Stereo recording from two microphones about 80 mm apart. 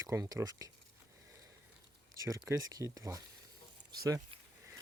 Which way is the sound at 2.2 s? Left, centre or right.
Right.